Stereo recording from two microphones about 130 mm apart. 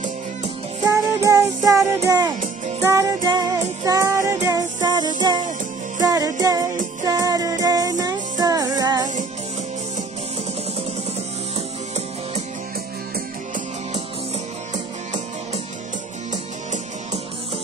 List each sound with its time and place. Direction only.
0.8 s music: 25° right (ahead or behind)